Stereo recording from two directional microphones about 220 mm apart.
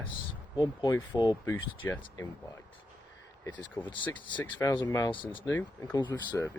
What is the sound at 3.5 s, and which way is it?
Speech, 5° left (ahead or behind).